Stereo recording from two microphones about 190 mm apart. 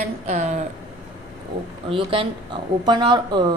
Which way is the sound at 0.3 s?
40° right (ahead or behind).